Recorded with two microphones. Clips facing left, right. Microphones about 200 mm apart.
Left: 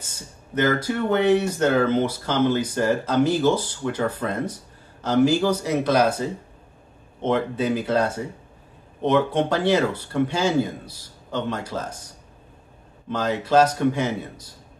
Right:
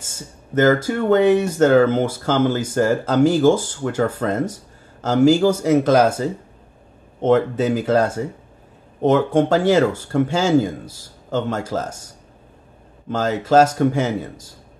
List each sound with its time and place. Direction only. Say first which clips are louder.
0.6 s speech: right 5 dB; 45° right (ahead or behind)
7.2 s speech: right 6 dB; 45° right (ahead or behind)
13.1 s speech: right 4 dB; 45° right (ahead or behind)